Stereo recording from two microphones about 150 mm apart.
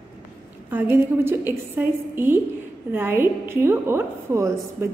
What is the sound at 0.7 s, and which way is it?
A woman's voice, 15° right (ahead or behind).